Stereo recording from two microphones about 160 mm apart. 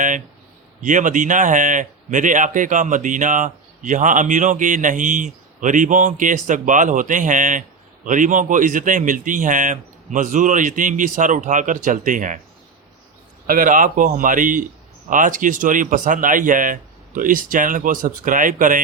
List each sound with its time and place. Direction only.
0.8 s speech: 55° right (ahead or behind)
13.5 s speech: 55° right (ahead or behind)